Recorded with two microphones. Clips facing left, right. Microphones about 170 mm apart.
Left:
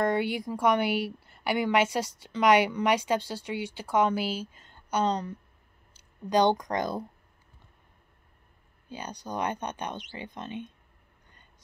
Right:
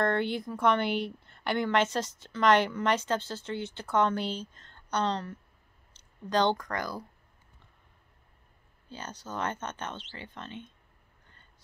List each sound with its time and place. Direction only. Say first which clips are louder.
0.0 s a woman's voice: left 1 dB; 10° left (ahead or behind)
8.8 s a woman's voice: left 3 dB; 15° left (ahead or behind)